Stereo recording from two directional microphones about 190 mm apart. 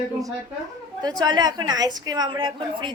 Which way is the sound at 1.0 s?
20° right (ahead or behind).